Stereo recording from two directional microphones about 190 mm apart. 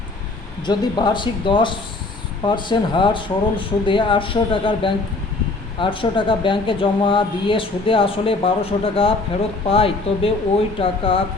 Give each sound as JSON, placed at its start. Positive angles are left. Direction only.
{"t": 0.6, "sound": "speech", "side_deg": 20}